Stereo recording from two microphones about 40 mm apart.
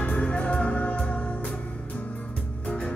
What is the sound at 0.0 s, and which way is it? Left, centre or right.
Music, left.